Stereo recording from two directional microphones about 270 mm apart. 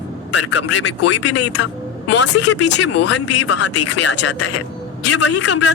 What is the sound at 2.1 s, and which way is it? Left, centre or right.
A woman's voice, left.